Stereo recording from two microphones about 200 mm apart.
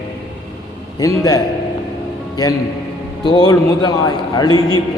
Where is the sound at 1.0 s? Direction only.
15° left (ahead or behind).